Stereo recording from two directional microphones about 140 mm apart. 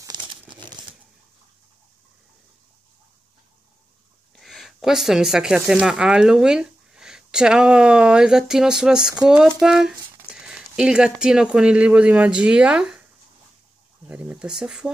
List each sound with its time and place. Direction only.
0.1 s crumpling: 35° right (ahead or behind)
0.7 s a sound: 35° right (ahead or behind)
4.4 s speech: centre (ahead or behind)
14.0 s speech: 5° right (ahead or behind)